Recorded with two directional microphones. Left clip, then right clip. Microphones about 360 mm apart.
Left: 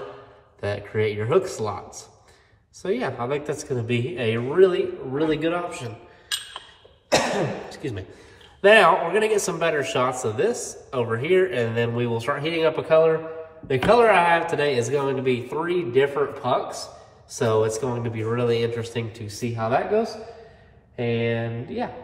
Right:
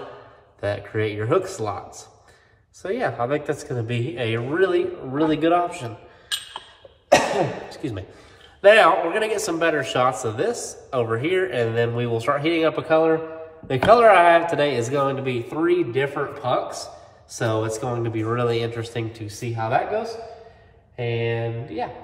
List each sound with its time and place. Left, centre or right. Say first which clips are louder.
0.6 s a man's voice: even; centre
2.8 s a man's voice: right 2 dB; centre
8.5 s a man's voice: right 1 dB; centre